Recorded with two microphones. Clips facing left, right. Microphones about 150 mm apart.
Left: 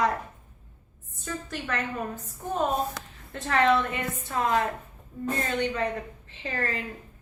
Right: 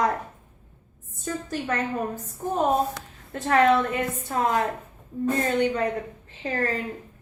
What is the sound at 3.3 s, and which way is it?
A woman's voice, 35° right (ahead or behind).